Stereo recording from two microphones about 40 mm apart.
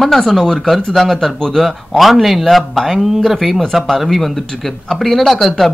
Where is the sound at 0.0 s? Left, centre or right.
Centre.